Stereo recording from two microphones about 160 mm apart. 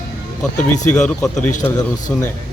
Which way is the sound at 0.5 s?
50° left (ahead or behind).